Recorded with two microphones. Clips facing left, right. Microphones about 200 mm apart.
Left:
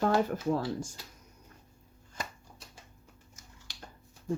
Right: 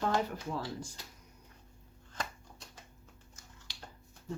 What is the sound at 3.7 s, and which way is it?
Music, 50° left (ahead or behind).